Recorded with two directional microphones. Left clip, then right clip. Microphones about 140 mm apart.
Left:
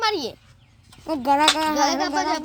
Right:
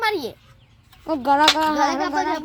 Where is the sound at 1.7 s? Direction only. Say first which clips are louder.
Right 1 dB; 15° left (ahead or behind).